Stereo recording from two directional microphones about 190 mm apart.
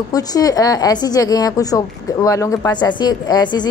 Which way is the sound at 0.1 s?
20° left (ahead or behind).